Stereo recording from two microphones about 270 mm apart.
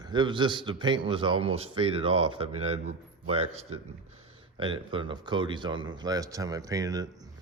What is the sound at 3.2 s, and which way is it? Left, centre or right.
Speech, right.